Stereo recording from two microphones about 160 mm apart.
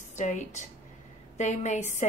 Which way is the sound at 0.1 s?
50° left (ahead or behind).